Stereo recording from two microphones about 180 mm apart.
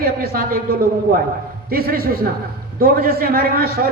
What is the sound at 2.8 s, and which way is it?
A man's voice, 55° right (ahead or behind).